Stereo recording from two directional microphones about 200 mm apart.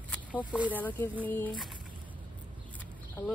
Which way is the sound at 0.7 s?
10° left (ahead or behind).